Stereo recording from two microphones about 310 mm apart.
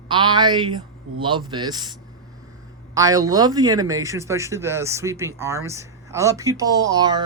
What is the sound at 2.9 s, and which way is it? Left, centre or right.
A man's voice, centre.